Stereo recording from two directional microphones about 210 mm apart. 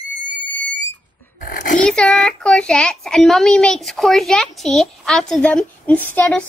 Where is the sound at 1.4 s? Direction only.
40° left (ahead or behind).